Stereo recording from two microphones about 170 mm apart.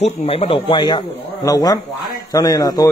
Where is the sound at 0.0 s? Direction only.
35° left (ahead or behind).